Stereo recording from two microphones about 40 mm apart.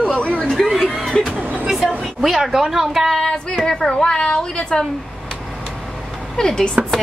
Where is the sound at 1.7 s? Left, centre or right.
Centre.